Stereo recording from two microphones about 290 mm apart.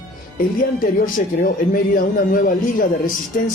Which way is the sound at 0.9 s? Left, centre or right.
Left.